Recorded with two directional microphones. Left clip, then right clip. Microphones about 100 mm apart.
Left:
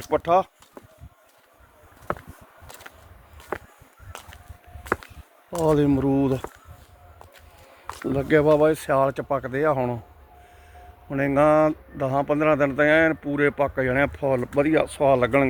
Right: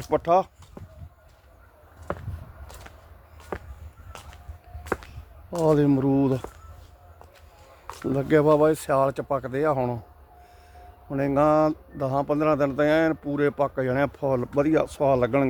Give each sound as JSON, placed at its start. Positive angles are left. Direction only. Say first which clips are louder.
{"t": 0.1, "sound": "speech", "louder": "left 1 dB", "side_deg": -45}
{"t": 5.6, "sound": "speech", "louder": "even", "side_deg": -50}
{"t": 8.0, "sound": "speech", "louder": "left 1 dB", "side_deg": -30}
{"t": 8.7, "sound": "speech", "louder": "left 1 dB", "side_deg": -15}
{"t": 9.2, "sound": "speech", "louder": "left 1 dB", "side_deg": 0}
{"t": 9.6, "sound": "speech", "louder": "left 2 dB", "side_deg": -10}
{"t": 11.1, "sound": "speech", "louder": "left 2 dB", "side_deg": -5}
{"t": 11.4, "sound": "speech", "louder": "left 3 dB", "side_deg": -20}
{"t": 12.5, "sound": "speech", "louder": "left 3 dB", "side_deg": -5}